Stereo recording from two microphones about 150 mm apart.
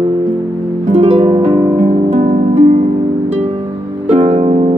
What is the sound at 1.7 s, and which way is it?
Music, 55° right (ahead or behind).